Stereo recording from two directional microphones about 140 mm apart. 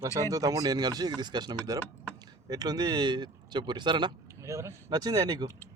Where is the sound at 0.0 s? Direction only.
25° right (ahead or behind).